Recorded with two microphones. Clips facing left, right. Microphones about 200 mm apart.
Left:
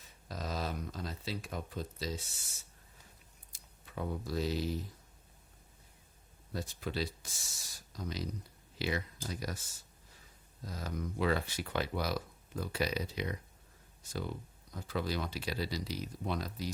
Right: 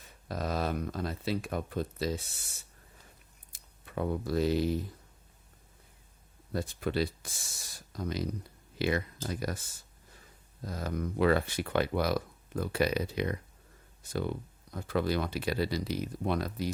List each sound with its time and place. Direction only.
0.3 s speech: 60° right (ahead or behind)
3.5 s speech: 60° right (ahead or behind)
6.5 s speech: 60° right (ahead or behind)
10.6 s speech: 55° right (ahead or behind)